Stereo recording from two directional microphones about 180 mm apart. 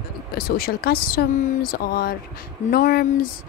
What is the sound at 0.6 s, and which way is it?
A woman's voice, 60° left (ahead or behind).